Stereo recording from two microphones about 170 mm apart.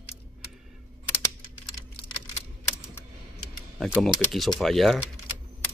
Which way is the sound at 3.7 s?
Centre (ahead or behind).